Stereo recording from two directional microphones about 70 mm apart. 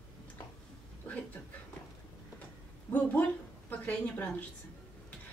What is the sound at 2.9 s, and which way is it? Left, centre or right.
Speech, left.